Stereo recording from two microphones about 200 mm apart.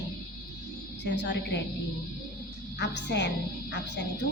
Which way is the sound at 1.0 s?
60° left (ahead or behind).